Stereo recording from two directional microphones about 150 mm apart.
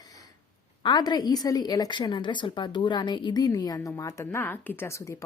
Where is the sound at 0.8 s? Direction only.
30° left (ahead or behind).